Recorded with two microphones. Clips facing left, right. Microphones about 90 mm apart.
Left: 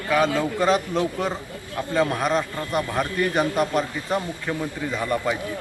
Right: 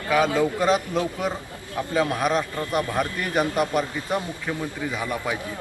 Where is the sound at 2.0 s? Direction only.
5° right (ahead or behind).